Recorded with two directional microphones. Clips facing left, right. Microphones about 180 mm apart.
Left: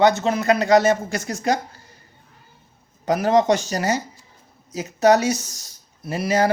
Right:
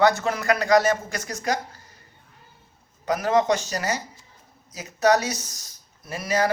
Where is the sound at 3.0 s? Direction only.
30° left (ahead or behind).